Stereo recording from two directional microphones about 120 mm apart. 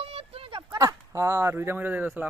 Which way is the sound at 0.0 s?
50° right (ahead or behind).